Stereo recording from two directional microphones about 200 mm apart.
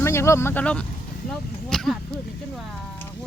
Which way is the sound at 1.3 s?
5° left (ahead or behind).